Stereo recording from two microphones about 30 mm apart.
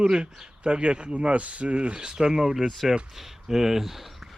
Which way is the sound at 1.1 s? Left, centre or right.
Right.